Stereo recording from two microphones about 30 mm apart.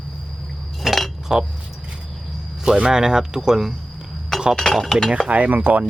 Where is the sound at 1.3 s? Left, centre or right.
Centre.